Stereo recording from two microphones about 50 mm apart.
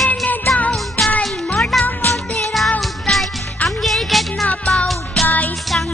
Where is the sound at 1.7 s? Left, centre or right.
Centre.